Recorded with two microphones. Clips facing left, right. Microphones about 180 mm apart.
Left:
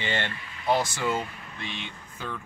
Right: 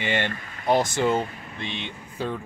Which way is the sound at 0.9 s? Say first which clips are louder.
Right 6 dB; 25° right (ahead or behind).